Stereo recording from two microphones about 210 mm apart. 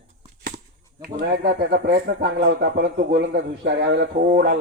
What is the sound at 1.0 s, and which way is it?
A man's voice, 45° right (ahead or behind).